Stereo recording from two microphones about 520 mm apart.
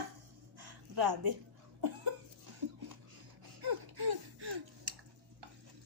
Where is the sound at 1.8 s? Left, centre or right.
Right.